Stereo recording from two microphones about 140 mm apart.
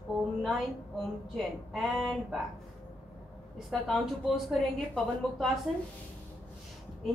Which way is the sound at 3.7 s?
Centre (ahead or behind).